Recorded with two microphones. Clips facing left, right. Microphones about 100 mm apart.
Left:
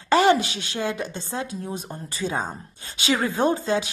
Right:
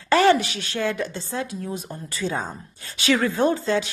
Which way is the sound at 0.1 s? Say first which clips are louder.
Right 1 dB; 20° left (ahead or behind).